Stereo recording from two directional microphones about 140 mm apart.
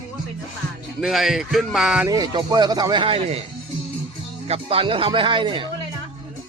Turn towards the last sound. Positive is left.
turn(degrees=-40)  # may be behind; listen again after turning